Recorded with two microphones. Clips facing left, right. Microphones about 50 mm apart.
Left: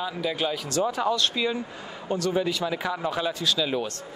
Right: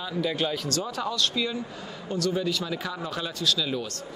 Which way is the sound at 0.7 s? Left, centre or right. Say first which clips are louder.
Left 5 dB; centre.